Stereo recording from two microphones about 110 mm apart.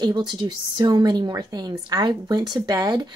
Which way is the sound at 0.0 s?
40° right (ahead or behind).